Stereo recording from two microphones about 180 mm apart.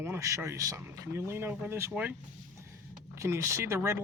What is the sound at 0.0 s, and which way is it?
Speech, 15° right (ahead or behind).